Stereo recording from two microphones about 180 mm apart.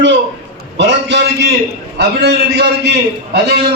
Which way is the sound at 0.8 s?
75° right (ahead or behind).